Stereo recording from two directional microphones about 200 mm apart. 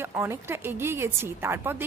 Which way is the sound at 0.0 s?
15° right (ahead or behind).